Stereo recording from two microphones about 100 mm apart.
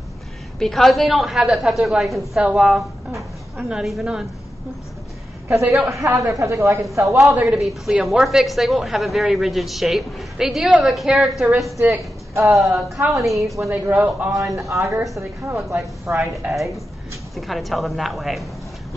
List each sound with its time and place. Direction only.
0.6 s a woman's voice: 5° left (ahead or behind)
5.9 s a man's voice: 30° right (ahead or behind)
7.5 s a woman's voice: centre (ahead or behind); by 12.5 s 20° right (ahead or behind)
13.2 s a woman's voice: centre (ahead or behind)
13.7 s a woman's voice: 15° right (ahead or behind)
14.3 s a man's voice: 35° right (ahead or behind)
17.4 s a woman's voice: centre (ahead or behind)